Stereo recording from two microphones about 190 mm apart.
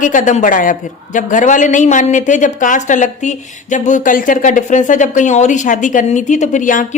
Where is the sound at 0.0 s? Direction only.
45° left (ahead or behind).